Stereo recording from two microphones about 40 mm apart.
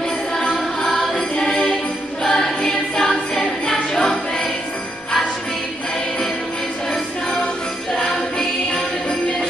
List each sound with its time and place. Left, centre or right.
0.8 s music: centre
1.3 s jingle bell: centre
2.2 s music: centre
3.9 s jingle bell: centre
7.9 s music: centre